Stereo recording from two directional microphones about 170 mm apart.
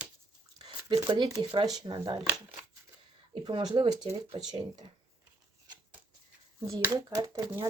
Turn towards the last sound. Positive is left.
turn(degrees=-20)  # may be behind; listen again after turning